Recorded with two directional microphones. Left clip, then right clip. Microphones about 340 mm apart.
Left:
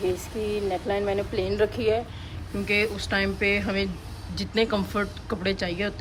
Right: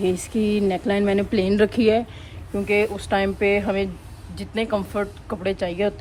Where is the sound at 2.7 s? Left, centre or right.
Centre.